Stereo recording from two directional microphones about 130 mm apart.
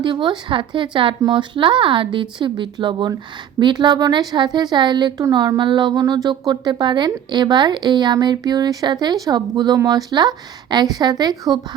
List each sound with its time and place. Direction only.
0.0 s a woman's voice: 35° right (ahead or behind)